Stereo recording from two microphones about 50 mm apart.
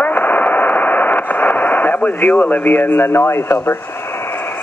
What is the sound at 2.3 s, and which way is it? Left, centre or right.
Speech, left.